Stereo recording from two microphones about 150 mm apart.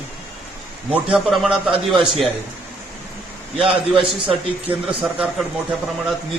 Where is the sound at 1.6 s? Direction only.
35° right (ahead or behind).